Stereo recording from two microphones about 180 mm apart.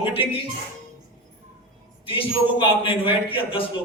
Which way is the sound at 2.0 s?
30° left (ahead or behind).